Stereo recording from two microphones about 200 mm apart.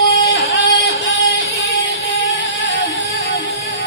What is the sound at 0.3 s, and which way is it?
Music, 30° left (ahead or behind).